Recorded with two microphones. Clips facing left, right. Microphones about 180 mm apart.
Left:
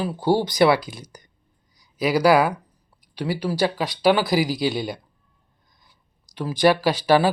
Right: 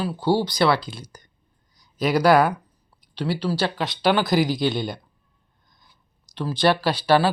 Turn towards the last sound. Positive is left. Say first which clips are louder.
# left 1 dB
turn(degrees=15)  # may be behind; listen again after turning